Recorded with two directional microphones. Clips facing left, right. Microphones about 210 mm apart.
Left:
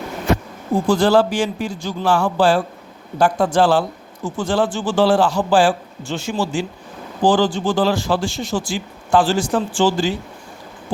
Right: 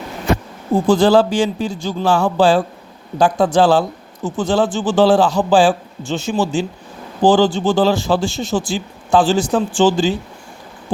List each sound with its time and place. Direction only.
0.9 s a man's voice: 25° right (ahead or behind)